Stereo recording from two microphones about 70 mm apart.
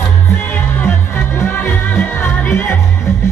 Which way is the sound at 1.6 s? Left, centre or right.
Left.